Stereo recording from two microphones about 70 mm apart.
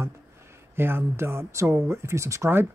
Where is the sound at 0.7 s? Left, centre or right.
Right.